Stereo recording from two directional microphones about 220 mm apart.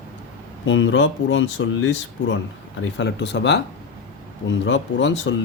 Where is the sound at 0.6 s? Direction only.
55° left (ahead or behind).